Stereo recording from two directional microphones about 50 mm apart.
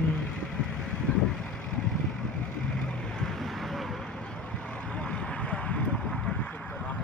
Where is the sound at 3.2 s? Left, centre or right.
Centre.